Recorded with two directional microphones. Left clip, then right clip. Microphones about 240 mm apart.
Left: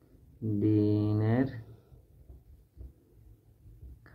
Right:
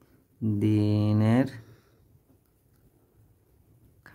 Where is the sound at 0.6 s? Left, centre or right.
Right.